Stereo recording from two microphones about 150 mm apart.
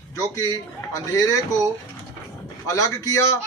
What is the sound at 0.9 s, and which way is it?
Speech, 20° left (ahead or behind).